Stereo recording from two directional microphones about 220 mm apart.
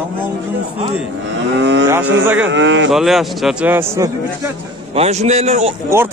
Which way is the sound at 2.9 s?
Centre (ahead or behind).